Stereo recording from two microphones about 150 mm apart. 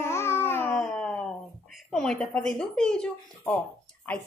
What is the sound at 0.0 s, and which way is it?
Babbling, 15° left (ahead or behind).